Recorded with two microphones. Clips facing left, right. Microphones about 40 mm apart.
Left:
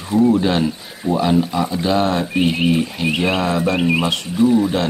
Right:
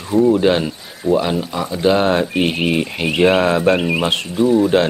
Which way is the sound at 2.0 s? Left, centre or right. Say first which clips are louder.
Right 2 dB; right.